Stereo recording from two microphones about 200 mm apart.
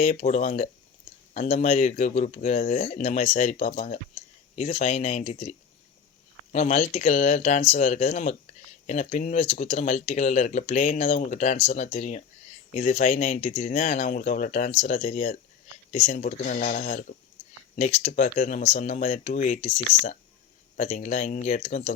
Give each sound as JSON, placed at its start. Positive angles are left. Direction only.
{"t": 0.0, "sound": "speech", "side_deg": 35}